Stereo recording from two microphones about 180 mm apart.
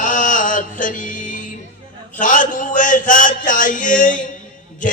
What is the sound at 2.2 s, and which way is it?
A man's voice, 45° left (ahead or behind).